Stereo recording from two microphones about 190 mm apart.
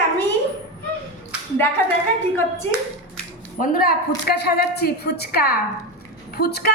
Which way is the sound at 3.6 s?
50° left (ahead or behind).